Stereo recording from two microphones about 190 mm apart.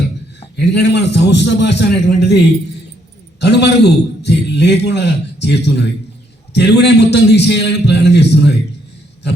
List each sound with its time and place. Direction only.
0.5 s a man's voice: 65° left (ahead or behind)
3.4 s a man's voice: 60° left (ahead or behind)